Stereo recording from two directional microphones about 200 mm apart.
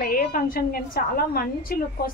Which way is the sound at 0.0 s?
45° left (ahead or behind).